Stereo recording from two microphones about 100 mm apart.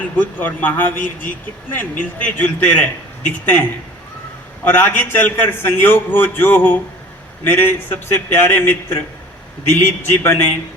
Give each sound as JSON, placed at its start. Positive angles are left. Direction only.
{"t": 0.2, "sound": "a man's voice", "side_deg": 20}